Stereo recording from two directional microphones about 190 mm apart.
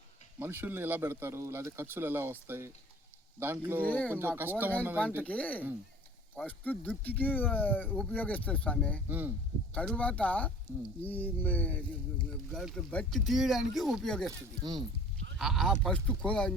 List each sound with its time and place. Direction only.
0.3 s speech: 10° right (ahead or behind)
3.8 s speech: 10° left (ahead or behind)
4.1 s speech: 10° right (ahead or behind)
5.2 s speech: 5° left (ahead or behind)
9.0 s speech: 10° right (ahead or behind)
9.7 s speech: 5° left (ahead or behind)
14.3 s speech: 20° right (ahead or behind)
15.4 s speech: centre (ahead or behind)